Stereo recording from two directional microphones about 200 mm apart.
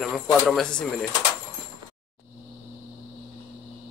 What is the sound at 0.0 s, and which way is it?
Speech, centre (ahead or behind).